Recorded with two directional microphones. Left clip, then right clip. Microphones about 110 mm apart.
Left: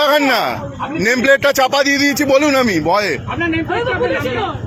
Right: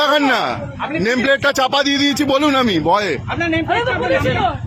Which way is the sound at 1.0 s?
Centre (ahead or behind).